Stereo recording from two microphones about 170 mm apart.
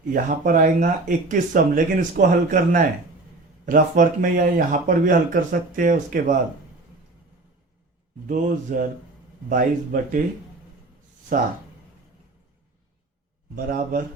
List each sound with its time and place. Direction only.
0.1 s speech: 50° right (ahead or behind)
8.3 s speech: 50° right (ahead or behind)
11.3 s a man's voice: 55° right (ahead or behind)
13.6 s a man's voice: 60° right (ahead or behind)